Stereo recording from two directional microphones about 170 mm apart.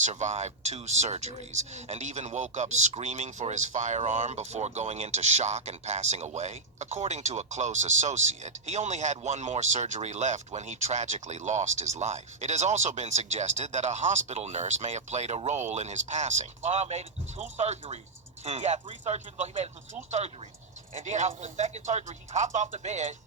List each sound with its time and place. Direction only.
0.0 s speech: 45° right (ahead or behind)